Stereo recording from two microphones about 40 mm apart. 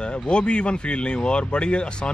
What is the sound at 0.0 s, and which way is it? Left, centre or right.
Speech, left.